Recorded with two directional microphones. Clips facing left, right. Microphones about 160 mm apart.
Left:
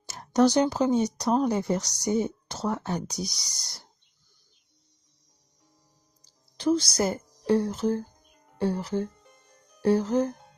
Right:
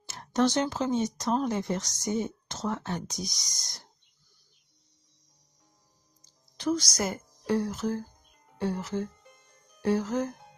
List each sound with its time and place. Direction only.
0.1 s speech: 35° left (ahead or behind)
6.2 s a woman's voice: 30° left (ahead or behind)